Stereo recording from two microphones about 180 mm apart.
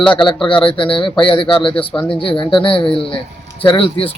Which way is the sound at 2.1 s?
30° left (ahead or behind).